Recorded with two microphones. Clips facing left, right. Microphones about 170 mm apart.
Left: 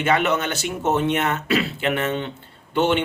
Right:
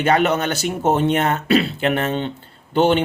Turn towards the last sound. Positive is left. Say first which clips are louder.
# right 4 dB
turn(degrees=-35)  # may be behind; listen again after turning